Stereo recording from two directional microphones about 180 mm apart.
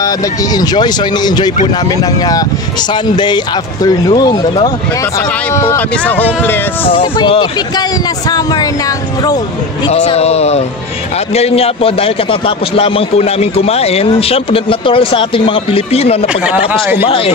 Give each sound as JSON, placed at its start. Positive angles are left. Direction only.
{"t": 0.0, "sound": "speech", "side_deg": 20}
{"t": 2.9, "sound": "speech", "side_deg": 25}
{"t": 6.9, "sound": "speech", "side_deg": 30}
{"t": 9.8, "sound": "a man's voice", "side_deg": 35}